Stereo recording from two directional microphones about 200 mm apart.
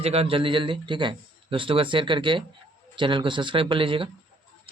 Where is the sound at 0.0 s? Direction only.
30° right (ahead or behind).